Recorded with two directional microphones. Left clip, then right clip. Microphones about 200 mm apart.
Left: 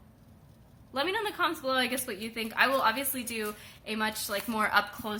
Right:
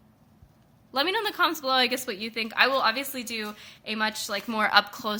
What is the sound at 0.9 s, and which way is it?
A woman's voice, 55° right (ahead or behind).